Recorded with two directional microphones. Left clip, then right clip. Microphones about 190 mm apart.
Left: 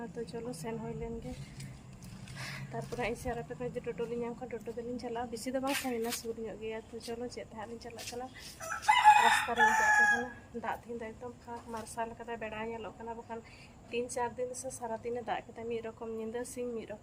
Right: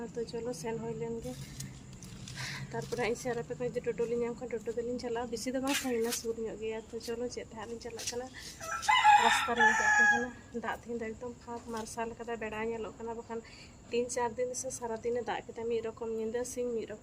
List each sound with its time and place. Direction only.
0.0 s speech: 5° left (ahead or behind)
2.4 s speech: centre (ahead or behind)
8.9 s chicken: 55° left (ahead or behind)
9.6 s crowing: 50° left (ahead or behind)
10.6 s speech: centre (ahead or behind)